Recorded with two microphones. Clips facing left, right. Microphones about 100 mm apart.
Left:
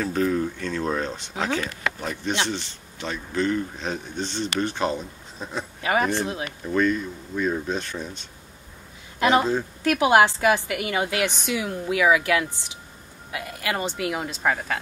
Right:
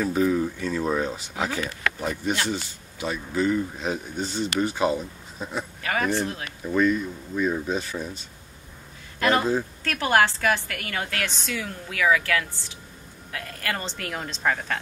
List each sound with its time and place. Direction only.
0.0 s a man's voice: 5° right (ahead or behind)
5.8 s speech: 20° left (ahead or behind)
6.6 s speech: 5° right (ahead or behind)
9.2 s a woman's voice: 15° left (ahead or behind)